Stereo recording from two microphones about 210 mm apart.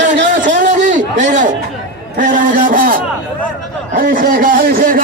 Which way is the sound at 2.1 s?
40° right (ahead or behind).